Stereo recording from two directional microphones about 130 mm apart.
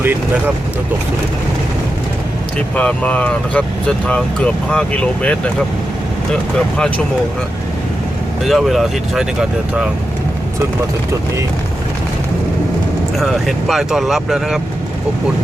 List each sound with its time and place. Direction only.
0.0 s speech: 15° right (ahead or behind)
2.7 s speech: 10° left (ahead or behind)
8.4 s speech: centre (ahead or behind)
13.1 s speech: centre (ahead or behind)